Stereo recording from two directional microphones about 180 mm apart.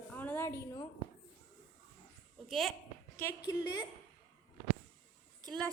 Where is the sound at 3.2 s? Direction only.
15° left (ahead or behind).